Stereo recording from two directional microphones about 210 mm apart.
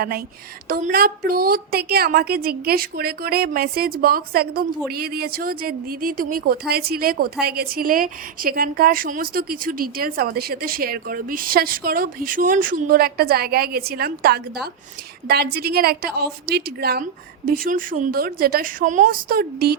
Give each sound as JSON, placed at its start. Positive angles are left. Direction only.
{"t": 0.7, "sound": "a woman's voice", "side_deg": -40}